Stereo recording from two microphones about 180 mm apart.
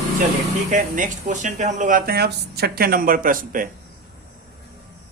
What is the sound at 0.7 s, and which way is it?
Speech, 45° right (ahead or behind).